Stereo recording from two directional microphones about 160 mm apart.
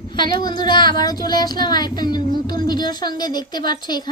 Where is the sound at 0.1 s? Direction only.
25° left (ahead or behind).